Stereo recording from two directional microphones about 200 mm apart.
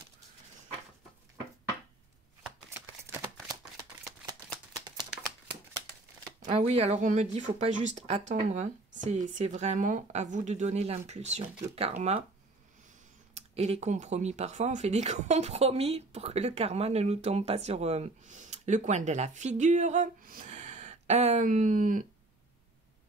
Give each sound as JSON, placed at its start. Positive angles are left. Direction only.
{"t": 6.4, "sound": "speech", "side_deg": -30}
{"t": 13.3, "sound": "speech", "side_deg": -35}